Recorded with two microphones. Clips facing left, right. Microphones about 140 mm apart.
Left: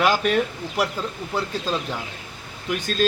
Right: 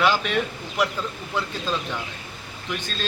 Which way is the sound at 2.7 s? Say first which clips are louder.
Left 9 dB; 40° left (ahead or behind).